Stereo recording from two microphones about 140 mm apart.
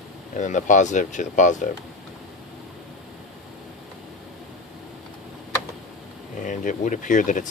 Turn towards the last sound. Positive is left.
turn(degrees=65)  # may be behind; listen again after turning